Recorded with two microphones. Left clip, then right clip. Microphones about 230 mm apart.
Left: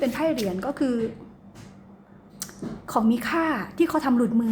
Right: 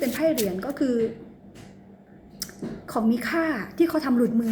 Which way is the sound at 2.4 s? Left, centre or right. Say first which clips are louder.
Right 1 dB; centre.